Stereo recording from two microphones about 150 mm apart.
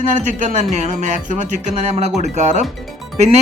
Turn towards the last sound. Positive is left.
turn(degrees=-45)  # may be behind; listen again after turning